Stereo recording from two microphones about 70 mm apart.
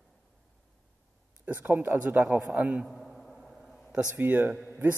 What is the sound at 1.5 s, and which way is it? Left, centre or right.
A man's voice, right.